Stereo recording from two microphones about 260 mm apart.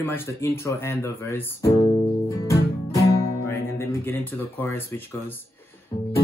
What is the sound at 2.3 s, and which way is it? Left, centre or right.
Music, centre.